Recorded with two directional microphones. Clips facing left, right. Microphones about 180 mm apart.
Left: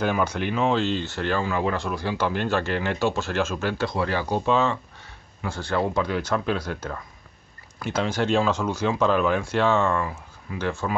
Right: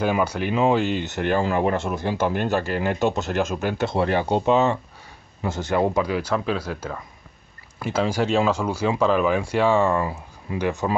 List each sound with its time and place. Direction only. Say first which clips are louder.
0.0 s speech: right 2 dB; 5° right (ahead or behind); by 2.1 s 25° right (ahead or behind)
2.7 s speech: right 2 dB; 10° right (ahead or behind)
6.0 s speech: right 1 dB; 5° right (ahead or behind)